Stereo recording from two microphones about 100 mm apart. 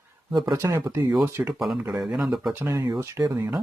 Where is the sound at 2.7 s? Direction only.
35° right (ahead or behind).